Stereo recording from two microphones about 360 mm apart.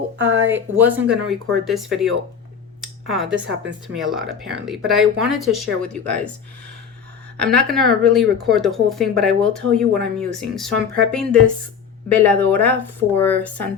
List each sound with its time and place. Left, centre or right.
0.2 s speech: right
0.4 s speech: centre
7.3 s speech: centre